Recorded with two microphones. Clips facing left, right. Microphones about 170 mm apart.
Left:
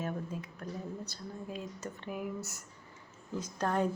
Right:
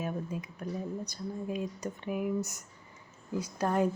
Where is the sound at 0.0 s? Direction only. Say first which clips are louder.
Right 2 dB; 10° right (ahead or behind).